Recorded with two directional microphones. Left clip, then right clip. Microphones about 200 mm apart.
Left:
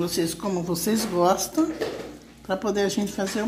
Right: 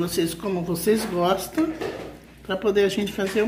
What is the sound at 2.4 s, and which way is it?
Speech, 30° left (ahead or behind).